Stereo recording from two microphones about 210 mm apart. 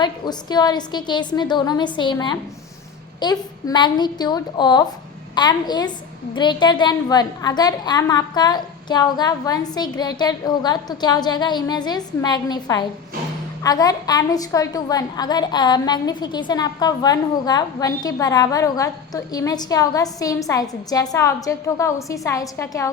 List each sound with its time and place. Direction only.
0.0 s a woman's voice: 20° left (ahead or behind)